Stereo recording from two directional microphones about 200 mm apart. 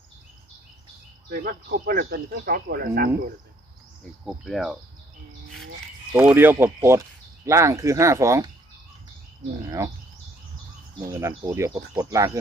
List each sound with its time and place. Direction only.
1.3 s speech: 50° right (ahead or behind)
4.3 s speech: centre (ahead or behind)
6.1 s speech: 10° right (ahead or behind)
9.6 s speech: 15° right (ahead or behind)
11.1 s speech: 15° right (ahead or behind)